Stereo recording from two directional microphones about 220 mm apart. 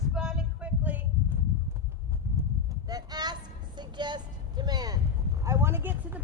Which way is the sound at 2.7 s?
15° right (ahead or behind).